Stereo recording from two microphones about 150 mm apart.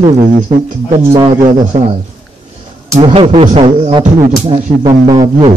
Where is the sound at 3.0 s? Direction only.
35° right (ahead or behind).